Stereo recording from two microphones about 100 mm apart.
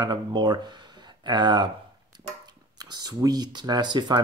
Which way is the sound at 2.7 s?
45° right (ahead or behind).